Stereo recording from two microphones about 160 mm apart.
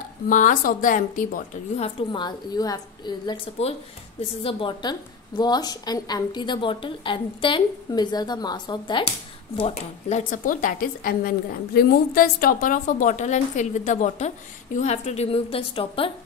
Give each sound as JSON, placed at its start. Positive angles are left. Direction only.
{"t": 0.3, "sound": "a woman's voice", "side_deg": 55}
{"t": 2.1, "sound": "a woman's voice", "side_deg": 25}
{"t": 4.4, "sound": "a woman's voice", "side_deg": 35}
{"t": 9.6, "sound": "a woman's voice", "side_deg": 40}